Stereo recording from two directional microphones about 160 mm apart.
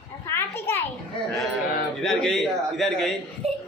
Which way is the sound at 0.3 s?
15° left (ahead or behind).